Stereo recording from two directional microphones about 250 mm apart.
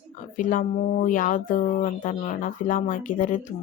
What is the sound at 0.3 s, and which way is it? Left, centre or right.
Speech, left.